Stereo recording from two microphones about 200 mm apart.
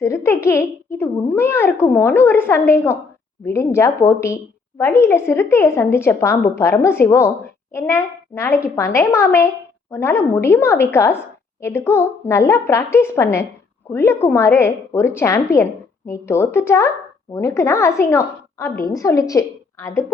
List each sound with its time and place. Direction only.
0.0 s a woman's voice: 15° left (ahead or behind)